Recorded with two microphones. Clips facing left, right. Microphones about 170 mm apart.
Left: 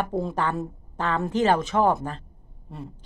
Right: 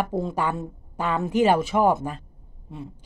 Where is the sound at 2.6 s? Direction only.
Centre (ahead or behind).